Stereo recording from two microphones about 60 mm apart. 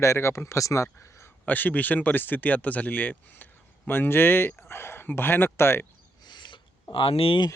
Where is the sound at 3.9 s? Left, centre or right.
Left.